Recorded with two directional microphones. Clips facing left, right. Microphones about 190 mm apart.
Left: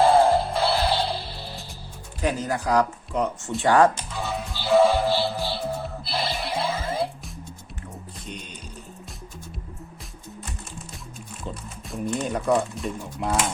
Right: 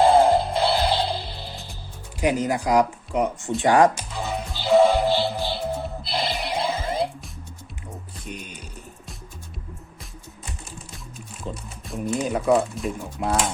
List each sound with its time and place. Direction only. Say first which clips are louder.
0.0 s music: right 1 dB; 20° right (ahead or behind)
2.2 s speech: right 3 dB; 15° right (ahead or behind)
3.6 s music: right 1 dB; 15° right (ahead or behind)
11.4 s speech: right 2 dB; centre (ahead or behind)